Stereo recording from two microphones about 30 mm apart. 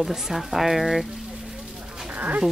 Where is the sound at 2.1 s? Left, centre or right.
Right.